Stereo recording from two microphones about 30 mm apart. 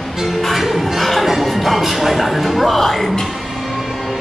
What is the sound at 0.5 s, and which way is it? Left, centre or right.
Music, centre.